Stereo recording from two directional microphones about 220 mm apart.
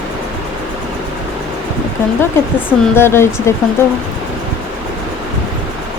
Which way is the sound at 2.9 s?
10° left (ahead or behind).